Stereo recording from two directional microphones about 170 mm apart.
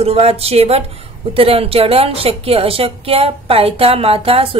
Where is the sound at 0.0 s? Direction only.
35° right (ahead or behind).